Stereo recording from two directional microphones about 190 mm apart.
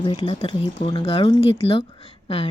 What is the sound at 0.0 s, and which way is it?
Speech, 25° left (ahead or behind).